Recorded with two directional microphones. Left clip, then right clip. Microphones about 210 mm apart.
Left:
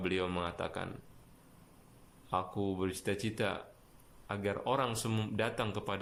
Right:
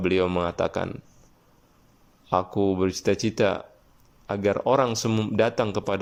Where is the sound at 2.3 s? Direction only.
30° right (ahead or behind).